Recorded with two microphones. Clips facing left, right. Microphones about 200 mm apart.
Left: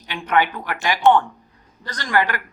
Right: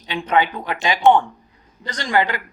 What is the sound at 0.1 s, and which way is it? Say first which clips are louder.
Speech: right 1 dB; 20° right (ahead or behind).